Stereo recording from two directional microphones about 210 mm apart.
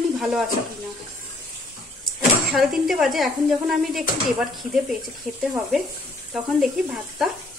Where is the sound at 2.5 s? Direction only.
Centre (ahead or behind).